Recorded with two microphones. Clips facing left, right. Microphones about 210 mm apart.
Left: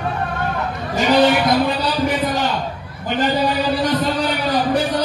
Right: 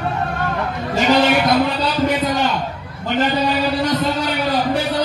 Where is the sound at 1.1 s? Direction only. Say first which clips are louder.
Left 1 dB; 25° right (ahead or behind).